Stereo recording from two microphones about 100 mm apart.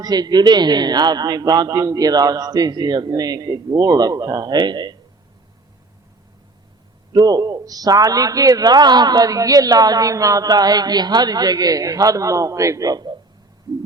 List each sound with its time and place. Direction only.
0.0 s speech: 45° right (ahead or behind)
7.1 s speech: 40° right (ahead or behind)